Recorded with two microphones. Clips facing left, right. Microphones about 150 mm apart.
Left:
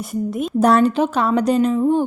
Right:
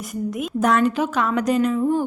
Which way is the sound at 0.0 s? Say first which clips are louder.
Left 4 dB; 30° left (ahead or behind).